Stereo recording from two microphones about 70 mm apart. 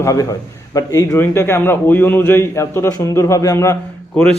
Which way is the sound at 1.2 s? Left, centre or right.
Left.